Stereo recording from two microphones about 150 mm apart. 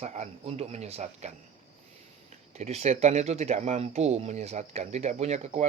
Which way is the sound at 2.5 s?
45° right (ahead or behind).